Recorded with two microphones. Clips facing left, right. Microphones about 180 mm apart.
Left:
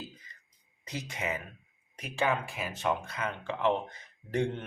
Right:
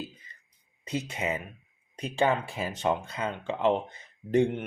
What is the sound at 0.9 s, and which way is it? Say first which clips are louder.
A man's voice: right 5 dB; 25° right (ahead or behind).